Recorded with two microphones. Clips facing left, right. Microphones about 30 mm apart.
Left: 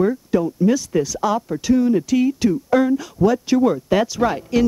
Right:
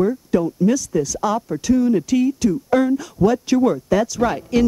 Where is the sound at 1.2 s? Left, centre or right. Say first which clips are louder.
Left 1 dB; centre.